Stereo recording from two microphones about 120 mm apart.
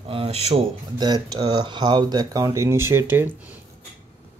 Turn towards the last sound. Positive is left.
turn(degrees=-15)  # may be behind; listen again after turning